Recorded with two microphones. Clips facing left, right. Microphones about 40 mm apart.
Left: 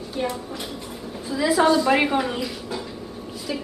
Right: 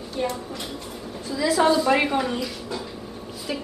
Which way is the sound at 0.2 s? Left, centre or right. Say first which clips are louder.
Even; centre.